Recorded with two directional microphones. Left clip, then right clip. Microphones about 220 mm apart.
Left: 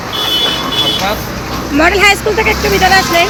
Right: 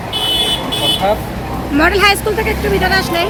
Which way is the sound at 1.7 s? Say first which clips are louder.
Left 3 dB; 15° right (ahead or behind).